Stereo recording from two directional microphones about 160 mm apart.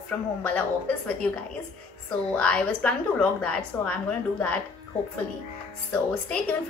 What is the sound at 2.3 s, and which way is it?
A woman's voice, 5° left (ahead or behind).